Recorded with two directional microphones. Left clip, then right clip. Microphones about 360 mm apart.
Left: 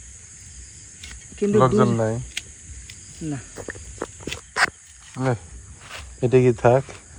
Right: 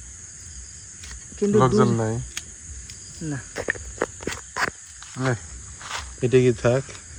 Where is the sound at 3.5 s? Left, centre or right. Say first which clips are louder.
Right 7 dB; right.